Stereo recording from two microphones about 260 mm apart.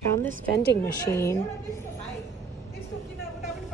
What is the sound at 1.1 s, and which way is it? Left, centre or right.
Speech, centre.